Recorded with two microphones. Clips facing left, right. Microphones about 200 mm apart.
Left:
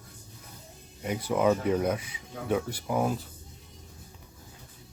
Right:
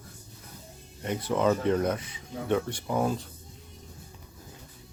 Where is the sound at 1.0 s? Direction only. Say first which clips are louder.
Even; 10° left (ahead or behind).